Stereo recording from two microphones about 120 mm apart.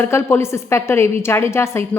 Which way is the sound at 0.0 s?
20° left (ahead or behind).